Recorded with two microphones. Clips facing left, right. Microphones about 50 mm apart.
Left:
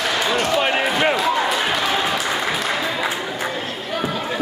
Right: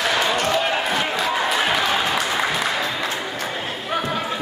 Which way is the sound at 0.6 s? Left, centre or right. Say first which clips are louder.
Left 2 dB; left.